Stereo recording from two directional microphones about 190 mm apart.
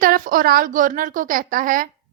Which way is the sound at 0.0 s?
50° right (ahead or behind).